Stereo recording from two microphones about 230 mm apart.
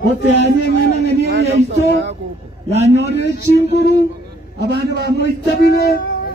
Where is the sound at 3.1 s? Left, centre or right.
Left.